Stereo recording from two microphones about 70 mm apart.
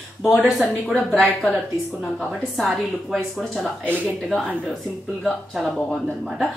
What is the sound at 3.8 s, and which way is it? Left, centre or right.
Speech, right.